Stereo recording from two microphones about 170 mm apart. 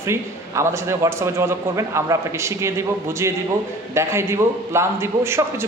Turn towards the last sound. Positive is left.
turn(degrees=-15)  # may be behind; listen again after turning